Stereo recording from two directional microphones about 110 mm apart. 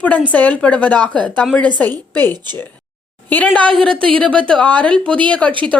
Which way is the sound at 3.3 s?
15° left (ahead or behind).